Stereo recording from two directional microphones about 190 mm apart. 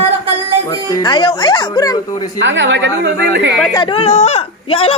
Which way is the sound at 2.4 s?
75° right (ahead or behind).